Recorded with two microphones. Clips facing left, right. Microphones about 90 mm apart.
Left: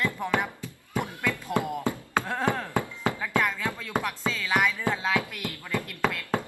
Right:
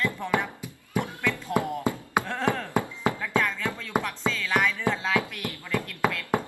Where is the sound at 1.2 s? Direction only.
15° left (ahead or behind).